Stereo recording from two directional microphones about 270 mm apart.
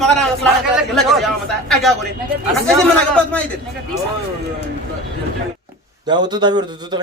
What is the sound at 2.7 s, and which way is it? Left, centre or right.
Speech, centre.